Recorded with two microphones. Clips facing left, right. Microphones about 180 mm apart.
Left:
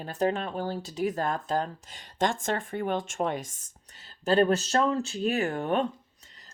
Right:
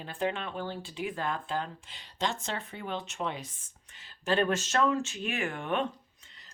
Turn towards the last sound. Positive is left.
turn(degrees=40)  # may be behind; listen again after turning